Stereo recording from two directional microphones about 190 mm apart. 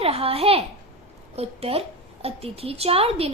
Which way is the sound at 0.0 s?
30° right (ahead or behind).